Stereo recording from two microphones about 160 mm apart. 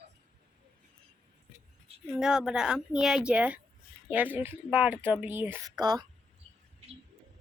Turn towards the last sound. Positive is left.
turn(degrees=-25)  # may be behind; listen again after turning